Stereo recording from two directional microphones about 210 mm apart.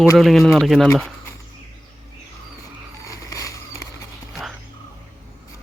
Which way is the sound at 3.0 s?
15° left (ahead or behind).